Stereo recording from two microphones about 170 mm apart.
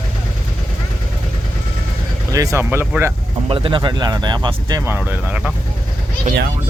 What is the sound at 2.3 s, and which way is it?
Speech, 20° right (ahead or behind).